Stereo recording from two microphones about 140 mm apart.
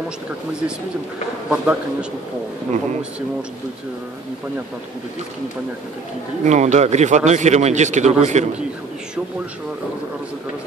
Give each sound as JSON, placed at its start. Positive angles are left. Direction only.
{"t": 1.5, "sound": "a man's voice", "side_deg": -10}
{"t": 6.4, "sound": "speech", "side_deg": -55}